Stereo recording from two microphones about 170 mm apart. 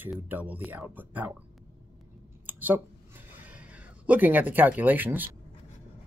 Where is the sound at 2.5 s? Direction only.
10° right (ahead or behind).